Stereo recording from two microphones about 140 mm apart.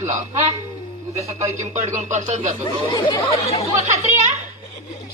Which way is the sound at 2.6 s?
30° left (ahead or behind).